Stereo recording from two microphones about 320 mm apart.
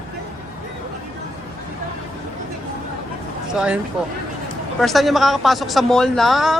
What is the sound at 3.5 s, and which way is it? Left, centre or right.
Speech, centre.